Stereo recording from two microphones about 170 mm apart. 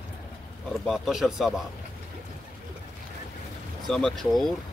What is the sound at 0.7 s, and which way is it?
Speech, centre (ahead or behind).